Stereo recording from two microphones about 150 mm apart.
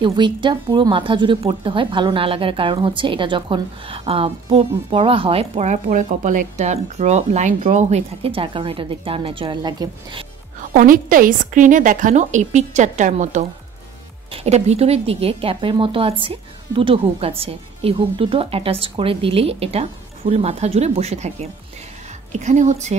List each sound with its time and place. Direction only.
0.0 s speech: 30° right (ahead or behind); by 8.0 s 55° right (ahead or behind)
8.2 s speech: 35° right (ahead or behind)
10.7 s a woman's voice: 60° right (ahead or behind)